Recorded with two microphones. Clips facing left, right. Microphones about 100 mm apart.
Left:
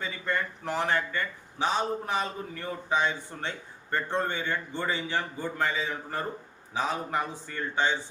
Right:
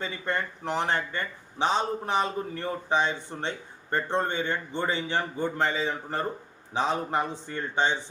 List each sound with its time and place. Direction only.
0.0 s speech: 25° right (ahead or behind)